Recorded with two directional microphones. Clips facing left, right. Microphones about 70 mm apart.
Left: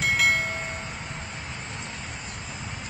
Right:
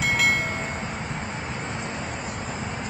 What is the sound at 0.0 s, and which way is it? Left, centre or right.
Train, centre.